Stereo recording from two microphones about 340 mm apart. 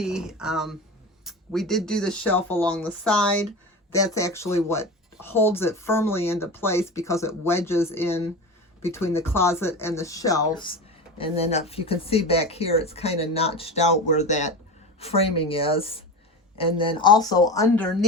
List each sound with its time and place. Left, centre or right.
0.0 s speech: centre